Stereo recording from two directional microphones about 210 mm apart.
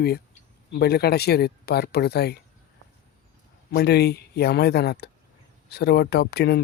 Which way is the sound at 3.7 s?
50° left (ahead or behind).